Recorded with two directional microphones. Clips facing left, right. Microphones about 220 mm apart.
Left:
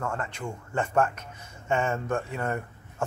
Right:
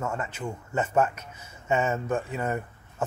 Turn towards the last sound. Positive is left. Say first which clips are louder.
# right 1 dB
turn(degrees=-5)  # may be behind; listen again after turning